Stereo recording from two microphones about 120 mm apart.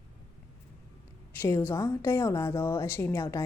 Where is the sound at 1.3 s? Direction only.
20° left (ahead or behind).